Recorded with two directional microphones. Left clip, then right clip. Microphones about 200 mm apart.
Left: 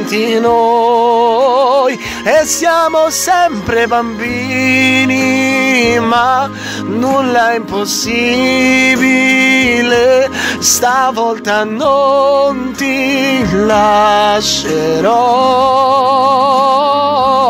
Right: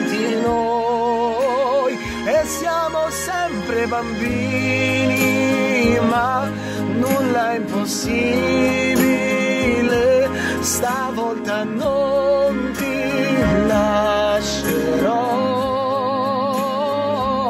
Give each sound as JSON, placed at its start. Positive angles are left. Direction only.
{"t": 0.3, "sound": "music", "side_deg": 45}
{"t": 8.2, "sound": "music", "side_deg": 45}